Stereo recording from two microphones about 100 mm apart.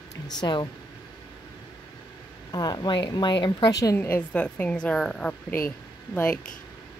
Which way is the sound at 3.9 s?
20° left (ahead or behind).